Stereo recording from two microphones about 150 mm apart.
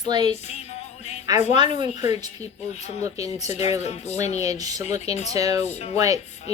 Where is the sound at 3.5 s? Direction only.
45° left (ahead or behind).